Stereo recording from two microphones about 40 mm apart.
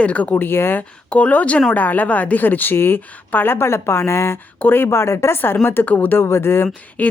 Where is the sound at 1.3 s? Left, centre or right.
Left.